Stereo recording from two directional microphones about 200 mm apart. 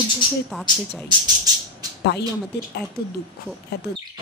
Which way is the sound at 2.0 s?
60° left (ahead or behind).